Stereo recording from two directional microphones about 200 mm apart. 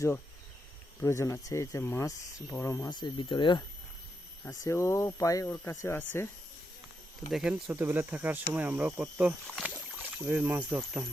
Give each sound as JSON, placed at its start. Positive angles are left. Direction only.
{"t": 1.0, "sound": "speech", "side_deg": 15}
{"t": 7.3, "sound": "speech", "side_deg": -5}